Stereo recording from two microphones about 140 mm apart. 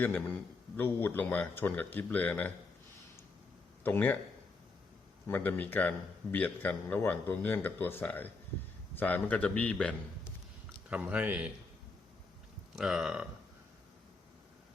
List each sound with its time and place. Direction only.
0.0 s speech: 10° left (ahead or behind)
3.8 s speech: 15° left (ahead or behind)
5.3 s speech: 10° left (ahead or behind)
10.8 s speech: 10° right (ahead or behind)
12.7 s speech: 5° right (ahead or behind)